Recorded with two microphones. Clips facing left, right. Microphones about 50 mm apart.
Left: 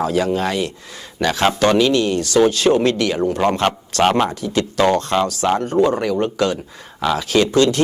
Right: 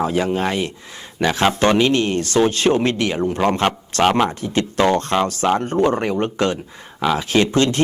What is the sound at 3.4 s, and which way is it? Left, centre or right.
Speech, centre.